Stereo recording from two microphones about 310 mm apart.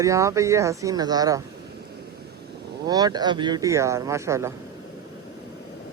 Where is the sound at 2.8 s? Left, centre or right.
Centre.